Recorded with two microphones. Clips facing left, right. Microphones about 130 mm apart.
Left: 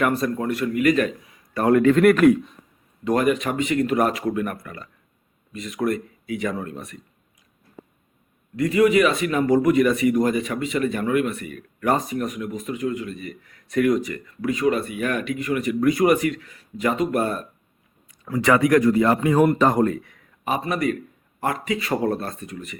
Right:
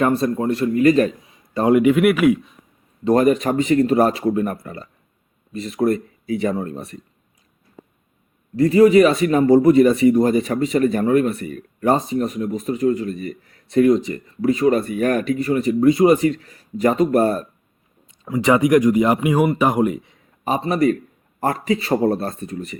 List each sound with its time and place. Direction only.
0.0 s a man's voice: 25° right (ahead or behind); by 2.6 s 5° right (ahead or behind)
3.0 s speech: 35° right (ahead or behind)
8.5 s speech: 35° right (ahead or behind)
18.3 s speech: 20° right (ahead or behind)
20.4 s speech: 35° right (ahead or behind)